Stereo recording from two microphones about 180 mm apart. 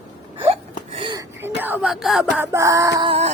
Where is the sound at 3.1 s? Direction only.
35° right (ahead or behind).